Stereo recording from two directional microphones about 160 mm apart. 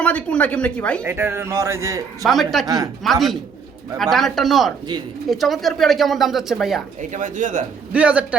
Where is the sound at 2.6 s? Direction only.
20° right (ahead or behind).